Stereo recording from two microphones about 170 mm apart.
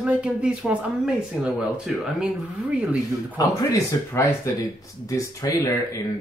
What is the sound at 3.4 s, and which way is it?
Speech, 20° left (ahead or behind).